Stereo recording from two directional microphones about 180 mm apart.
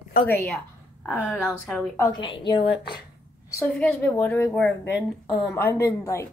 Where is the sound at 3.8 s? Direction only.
10° left (ahead or behind).